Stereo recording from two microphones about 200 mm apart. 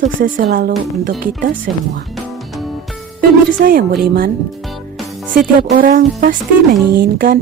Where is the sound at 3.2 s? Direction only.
45° right (ahead or behind).